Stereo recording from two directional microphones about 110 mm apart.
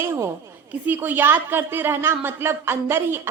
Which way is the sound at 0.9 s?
15° right (ahead or behind).